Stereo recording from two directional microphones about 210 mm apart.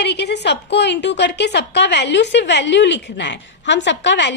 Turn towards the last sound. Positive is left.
turn(degrees=55)  # may be behind; listen again after turning